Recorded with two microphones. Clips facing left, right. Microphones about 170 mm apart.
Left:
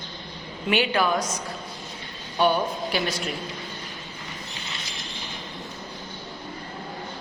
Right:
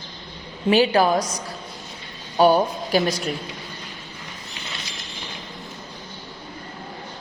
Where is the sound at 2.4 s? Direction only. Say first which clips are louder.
Right 5 dB; 40° right (ahead or behind).